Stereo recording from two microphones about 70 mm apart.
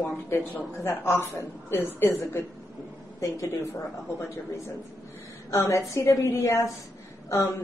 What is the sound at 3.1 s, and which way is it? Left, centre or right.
A woman's voice, left.